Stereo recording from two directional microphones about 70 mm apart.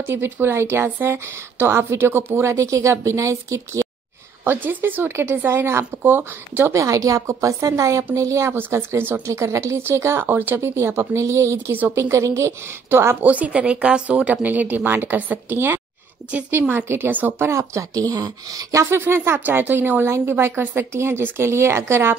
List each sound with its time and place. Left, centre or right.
0.0 s a woman's voice: right
2.5 s a woman's voice: right
4.5 s a woman's voice: right
6.7 s a woman's voice: right
9.2 s a woman's voice: right
10.8 s a woman's voice: right
13.3 s a woman's voice: centre
17.5 s a woman's voice: right
18.0 s speech: right
18.9 s a woman's voice: right